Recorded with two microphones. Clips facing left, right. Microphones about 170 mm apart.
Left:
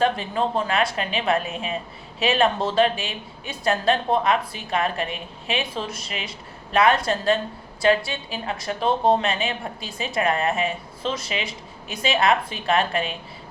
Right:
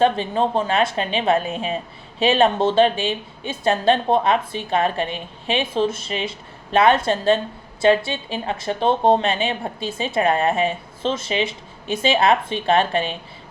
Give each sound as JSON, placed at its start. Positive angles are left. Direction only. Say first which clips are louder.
{"t": 0.0, "sound": "a woman's voice", "louder": "right 4 dB", "side_deg": -25}